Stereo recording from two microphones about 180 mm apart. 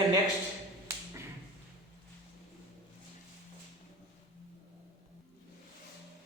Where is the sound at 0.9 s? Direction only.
15° right (ahead or behind).